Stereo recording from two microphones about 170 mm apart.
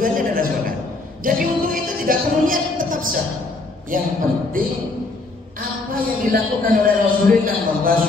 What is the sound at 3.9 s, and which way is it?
Speech, 55° right (ahead or behind).